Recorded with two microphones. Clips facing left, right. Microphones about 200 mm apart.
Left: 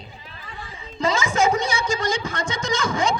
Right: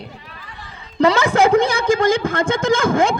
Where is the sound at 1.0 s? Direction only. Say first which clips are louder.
Right 6 dB; 60° right (ahead or behind).